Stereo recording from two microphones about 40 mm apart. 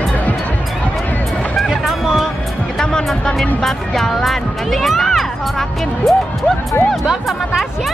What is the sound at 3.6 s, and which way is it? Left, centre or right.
Speech, centre.